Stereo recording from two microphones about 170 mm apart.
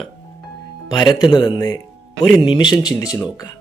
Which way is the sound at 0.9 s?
25° left (ahead or behind).